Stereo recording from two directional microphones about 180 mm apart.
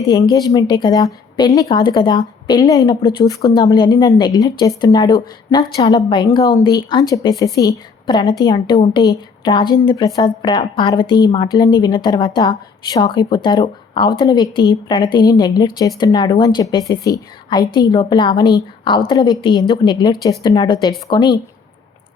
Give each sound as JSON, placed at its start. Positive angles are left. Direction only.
{"t": 0.0, "sound": "a woman's voice", "side_deg": 20}